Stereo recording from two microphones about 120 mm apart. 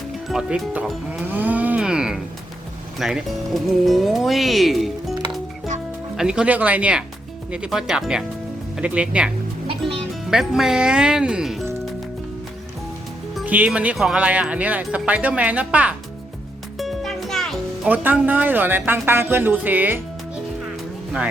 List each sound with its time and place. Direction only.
0.3 s speech: 5° right (ahead or behind)
1.3 s a sound: 15° right (ahead or behind)
3.0 s speech: 5° right (ahead or behind)
6.1 s speech: 5° right (ahead or behind)
13.4 s speech: 15° right (ahead or behind)
16.7 s music: centre (ahead or behind)
17.8 s speech: 15° right (ahead or behind)